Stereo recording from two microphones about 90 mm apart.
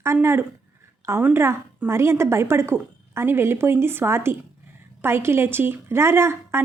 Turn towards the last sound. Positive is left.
turn(degrees=-30)  # may be behind; listen again after turning